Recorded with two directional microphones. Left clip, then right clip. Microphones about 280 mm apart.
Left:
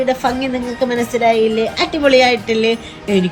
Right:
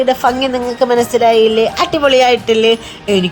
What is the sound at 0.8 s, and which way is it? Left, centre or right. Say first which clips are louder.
Speech: right 5 dB; right.